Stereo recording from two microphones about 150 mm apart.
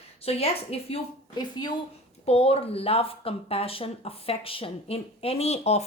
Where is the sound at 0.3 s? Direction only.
40° left (ahead or behind).